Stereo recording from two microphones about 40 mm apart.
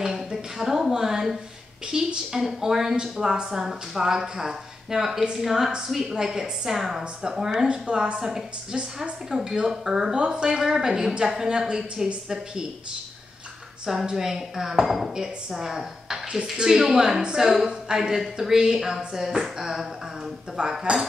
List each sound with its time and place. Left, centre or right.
0.0 s a sound: centre
1.9 s speech: centre
7.6 s a woman's voice: right
8.7 s a woman's voice: right
9.4 s speech: centre
10.1 s speech: right
14.0 s a woman's voice: centre
18.1 s a woman's voice: centre